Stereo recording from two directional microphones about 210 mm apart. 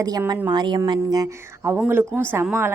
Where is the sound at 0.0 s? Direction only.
15° right (ahead or behind).